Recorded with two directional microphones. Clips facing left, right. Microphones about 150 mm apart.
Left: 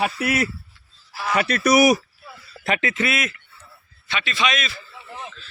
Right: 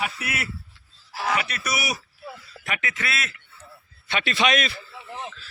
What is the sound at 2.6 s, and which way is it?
Speech, 30° left (ahead or behind).